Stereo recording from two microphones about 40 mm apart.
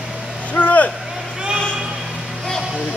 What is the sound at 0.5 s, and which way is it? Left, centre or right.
Vehicle, left.